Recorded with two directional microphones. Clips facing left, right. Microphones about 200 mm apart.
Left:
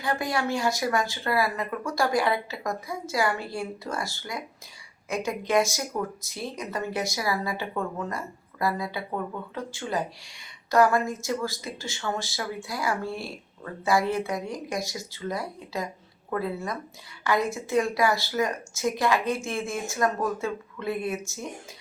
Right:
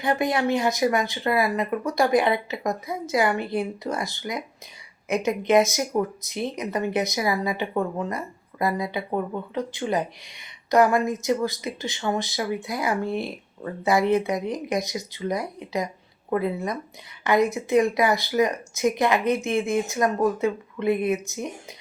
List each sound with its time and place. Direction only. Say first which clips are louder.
0.0 s speech: right 5 dB; 20° right (ahead or behind)